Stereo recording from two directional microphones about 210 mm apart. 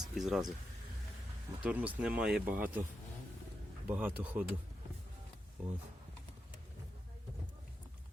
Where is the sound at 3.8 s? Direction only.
10° right (ahead or behind).